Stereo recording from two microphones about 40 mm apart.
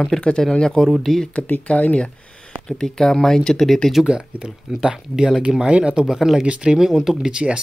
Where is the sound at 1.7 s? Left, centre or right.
Left.